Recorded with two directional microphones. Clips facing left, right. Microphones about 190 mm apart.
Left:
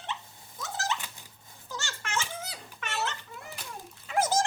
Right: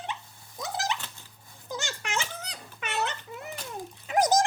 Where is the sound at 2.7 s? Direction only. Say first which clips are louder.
Right 3 dB; 15° right (ahead or behind).